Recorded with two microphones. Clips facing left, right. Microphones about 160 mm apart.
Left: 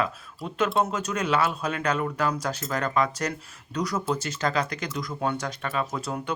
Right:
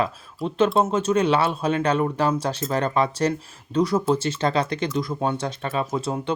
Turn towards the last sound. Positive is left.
turn(degrees=-25)  # may be behind; listen again after turning